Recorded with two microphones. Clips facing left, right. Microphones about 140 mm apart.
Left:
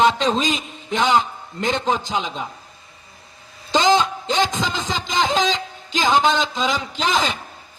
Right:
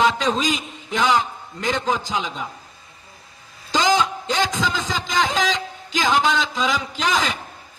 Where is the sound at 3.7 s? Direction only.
25° left (ahead or behind).